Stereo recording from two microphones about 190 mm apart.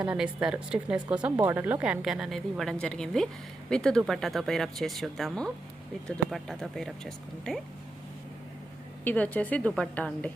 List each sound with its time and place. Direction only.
0.0 s speech: 5° right (ahead or behind)
9.0 s a woman's voice: 10° left (ahead or behind)